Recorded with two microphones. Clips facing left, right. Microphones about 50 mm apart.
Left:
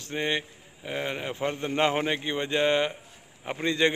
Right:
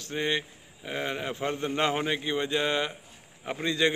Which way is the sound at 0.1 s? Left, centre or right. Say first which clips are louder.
Even; centre.